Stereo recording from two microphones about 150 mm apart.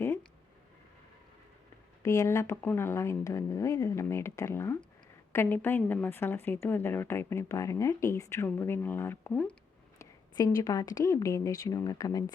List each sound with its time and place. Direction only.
2.0 s a woman's voice: 20° left (ahead or behind)
10.0 s speech: 25° left (ahead or behind)